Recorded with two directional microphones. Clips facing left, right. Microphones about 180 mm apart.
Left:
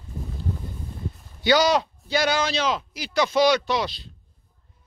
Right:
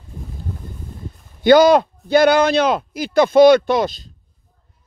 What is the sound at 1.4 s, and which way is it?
A man's voice, 55° right (ahead or behind).